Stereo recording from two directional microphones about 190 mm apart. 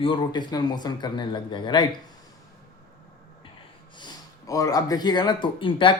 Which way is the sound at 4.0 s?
20° left (ahead or behind).